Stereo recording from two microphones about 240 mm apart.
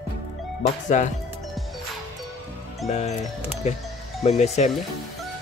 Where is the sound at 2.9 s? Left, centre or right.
Left.